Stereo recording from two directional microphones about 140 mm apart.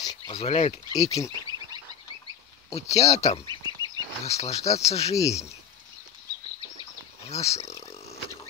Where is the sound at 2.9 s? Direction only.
50° left (ahead or behind).